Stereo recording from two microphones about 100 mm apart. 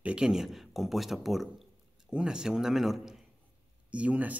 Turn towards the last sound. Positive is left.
turn(degrees=-15)  # may be behind; listen again after turning